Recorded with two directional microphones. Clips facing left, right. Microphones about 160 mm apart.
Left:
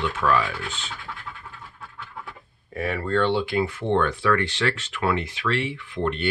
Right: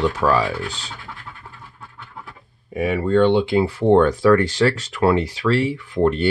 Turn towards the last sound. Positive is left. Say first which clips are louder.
# right 8 dB
turn(degrees=-40)  # may be behind; listen again after turning